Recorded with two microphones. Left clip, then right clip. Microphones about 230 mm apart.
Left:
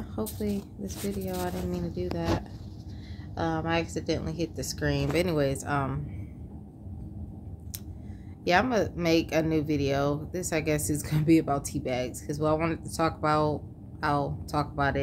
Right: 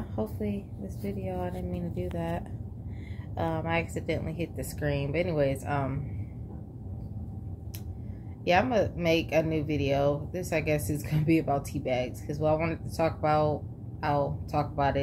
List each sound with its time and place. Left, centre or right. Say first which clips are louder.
0.1 s speech: left 1 dB; centre
3.3 s speech: left 1 dB; left
8.5 s speech: even; left